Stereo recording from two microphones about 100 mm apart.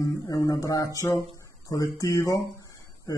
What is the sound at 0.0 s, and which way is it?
Speech, 35° left (ahead or behind).